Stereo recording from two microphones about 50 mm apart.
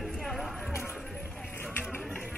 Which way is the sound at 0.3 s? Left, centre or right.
Centre.